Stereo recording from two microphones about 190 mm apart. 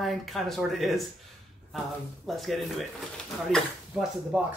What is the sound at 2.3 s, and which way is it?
Speech, centre (ahead or behind).